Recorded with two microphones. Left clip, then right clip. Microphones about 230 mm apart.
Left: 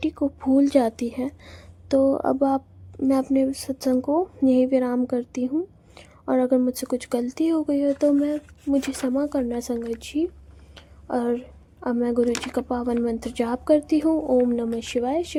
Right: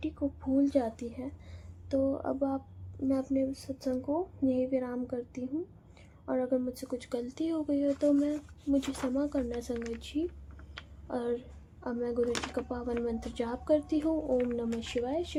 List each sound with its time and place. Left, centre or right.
0.0 s a woman's voice: left